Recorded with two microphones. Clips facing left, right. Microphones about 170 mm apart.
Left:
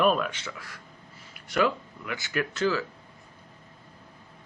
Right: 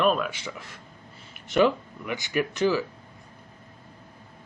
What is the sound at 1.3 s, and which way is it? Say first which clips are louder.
Speech: right 4 dB; 20° right (ahead or behind).